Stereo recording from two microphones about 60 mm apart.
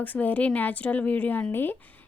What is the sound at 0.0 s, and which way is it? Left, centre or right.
A woman's voice, left.